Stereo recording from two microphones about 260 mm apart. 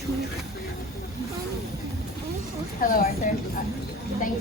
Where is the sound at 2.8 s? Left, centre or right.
Left.